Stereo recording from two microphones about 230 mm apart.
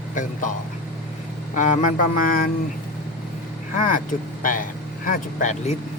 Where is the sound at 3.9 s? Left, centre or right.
Left.